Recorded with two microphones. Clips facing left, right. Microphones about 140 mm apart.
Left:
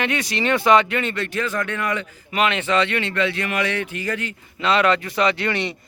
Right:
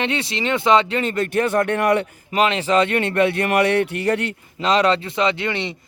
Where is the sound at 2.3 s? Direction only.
35° right (ahead or behind); by 4.3 s 65° right (ahead or behind).